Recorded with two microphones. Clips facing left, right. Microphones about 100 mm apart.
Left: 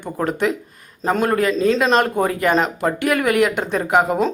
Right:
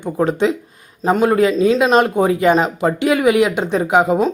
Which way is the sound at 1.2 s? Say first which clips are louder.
Right 4 dB; 20° right (ahead or behind).